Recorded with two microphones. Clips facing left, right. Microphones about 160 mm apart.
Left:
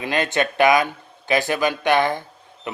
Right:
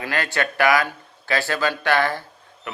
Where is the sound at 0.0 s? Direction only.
20° left (ahead or behind).